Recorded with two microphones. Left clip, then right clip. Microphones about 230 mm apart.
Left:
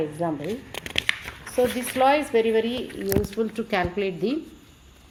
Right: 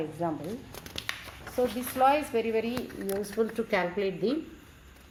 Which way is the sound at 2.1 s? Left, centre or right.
Left.